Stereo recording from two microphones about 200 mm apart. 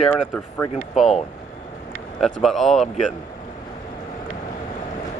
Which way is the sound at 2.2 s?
Centre (ahead or behind).